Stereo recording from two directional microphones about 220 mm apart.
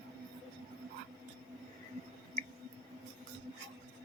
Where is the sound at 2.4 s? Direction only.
30° right (ahead or behind).